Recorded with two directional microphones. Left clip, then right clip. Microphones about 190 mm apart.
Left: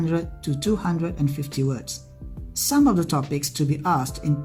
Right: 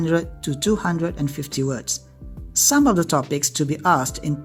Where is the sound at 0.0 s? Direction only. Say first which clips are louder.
Right 5 dB; 35° right (ahead or behind).